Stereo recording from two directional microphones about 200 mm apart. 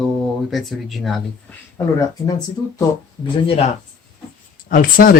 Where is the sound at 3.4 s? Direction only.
30° left (ahead or behind).